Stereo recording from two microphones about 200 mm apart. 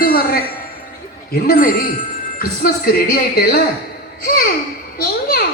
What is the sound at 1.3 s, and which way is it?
A child's voice, 45° left (ahead or behind).